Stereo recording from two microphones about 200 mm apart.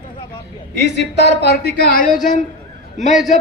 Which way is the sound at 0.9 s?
55° left (ahead or behind).